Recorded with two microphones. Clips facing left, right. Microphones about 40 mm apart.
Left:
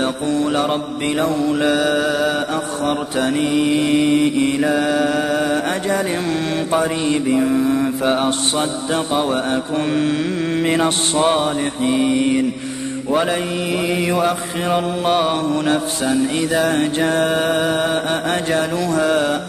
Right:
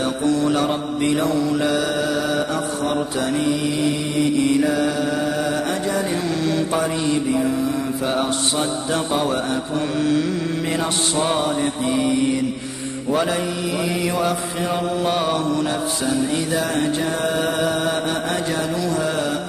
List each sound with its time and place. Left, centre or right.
0.0 s mantra: left
4.1 s mantra: left
6.7 s a sound: left
7.5 s mantra: left
8.5 s mantra: left
13.1 s a sound: left
13.8 s mantra: left
16.1 s a sound: left
16.7 s mantra: left